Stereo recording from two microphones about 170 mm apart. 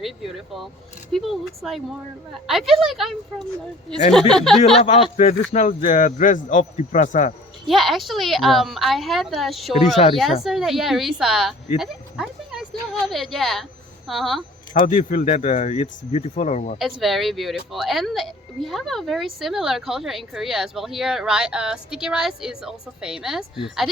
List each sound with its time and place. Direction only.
0.0 s speech: centre (ahead or behind)
4.8 s speech: 35° left (ahead or behind)
7.7 s speech: centre (ahead or behind)
11.8 s a sound: centre (ahead or behind)
14.1 s speech: centre (ahead or behind)
14.8 s speech: 45° left (ahead or behind)
16.7 s speech: centre (ahead or behind)